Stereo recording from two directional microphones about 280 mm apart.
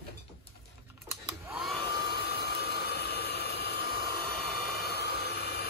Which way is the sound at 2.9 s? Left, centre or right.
Left.